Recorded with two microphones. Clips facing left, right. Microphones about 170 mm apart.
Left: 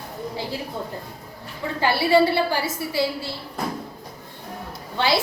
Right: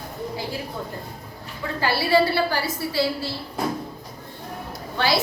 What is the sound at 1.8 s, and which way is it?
A woman's voice, 20° left (ahead or behind).